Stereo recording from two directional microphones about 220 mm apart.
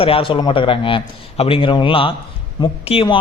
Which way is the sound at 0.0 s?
25° left (ahead or behind).